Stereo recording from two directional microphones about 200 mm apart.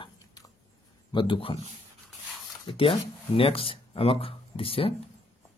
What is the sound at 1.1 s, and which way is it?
Speech, 25° left (ahead or behind).